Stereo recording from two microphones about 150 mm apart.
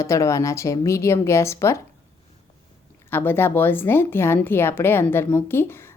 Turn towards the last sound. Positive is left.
turn(degrees=15)  # may be behind; listen again after turning